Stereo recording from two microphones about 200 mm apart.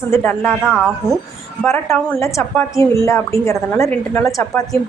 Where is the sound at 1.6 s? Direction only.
10° left (ahead or behind).